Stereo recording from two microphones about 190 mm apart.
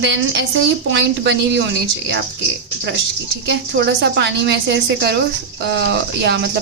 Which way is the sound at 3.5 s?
70° right (ahead or behind).